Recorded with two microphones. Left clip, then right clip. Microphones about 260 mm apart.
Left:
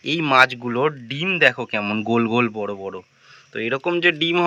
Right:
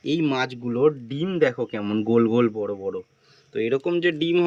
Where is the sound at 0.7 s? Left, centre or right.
Left.